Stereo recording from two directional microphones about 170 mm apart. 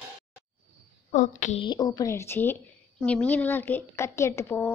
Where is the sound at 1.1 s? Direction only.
45° left (ahead or behind).